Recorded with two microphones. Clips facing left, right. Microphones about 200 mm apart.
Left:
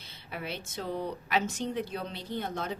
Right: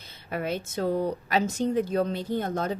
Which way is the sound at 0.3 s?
45° right (ahead or behind).